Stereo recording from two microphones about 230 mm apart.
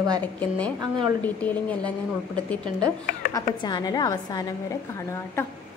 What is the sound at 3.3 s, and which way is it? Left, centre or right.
A woman's voice, centre.